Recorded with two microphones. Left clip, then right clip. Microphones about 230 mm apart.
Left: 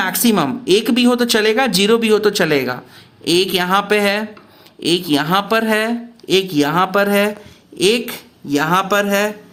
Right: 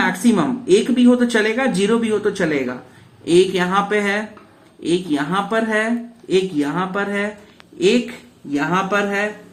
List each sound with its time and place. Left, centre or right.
0.0 s speech: left